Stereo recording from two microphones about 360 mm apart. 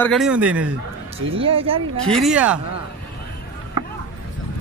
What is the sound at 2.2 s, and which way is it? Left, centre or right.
Speech, centre.